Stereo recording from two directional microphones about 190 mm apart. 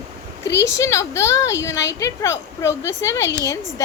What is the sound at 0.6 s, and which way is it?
Speech, 15° left (ahead or behind).